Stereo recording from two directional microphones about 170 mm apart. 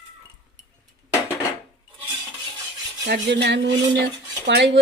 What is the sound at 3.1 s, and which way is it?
A woman's voice, 85° right.